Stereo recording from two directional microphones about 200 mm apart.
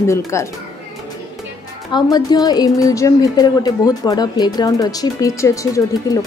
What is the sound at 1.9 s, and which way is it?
A woman's voice, 20° left (ahead or behind).